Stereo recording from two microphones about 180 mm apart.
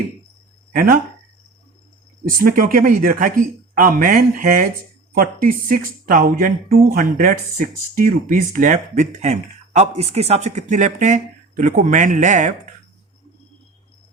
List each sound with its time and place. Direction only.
0.7 s speech: 50° right (ahead or behind)
2.2 s speech: 50° right (ahead or behind)